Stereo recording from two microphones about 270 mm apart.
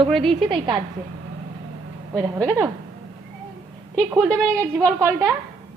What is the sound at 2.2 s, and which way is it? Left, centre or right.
Speech, centre.